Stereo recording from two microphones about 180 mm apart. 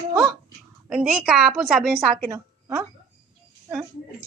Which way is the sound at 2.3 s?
15° right (ahead or behind).